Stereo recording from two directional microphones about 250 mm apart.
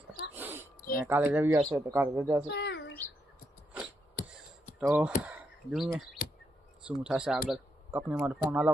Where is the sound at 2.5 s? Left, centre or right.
Left.